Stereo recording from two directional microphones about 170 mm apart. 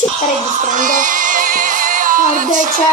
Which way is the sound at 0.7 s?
50° right (ahead or behind).